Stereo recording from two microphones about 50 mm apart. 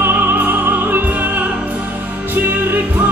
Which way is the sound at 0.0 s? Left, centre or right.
Right.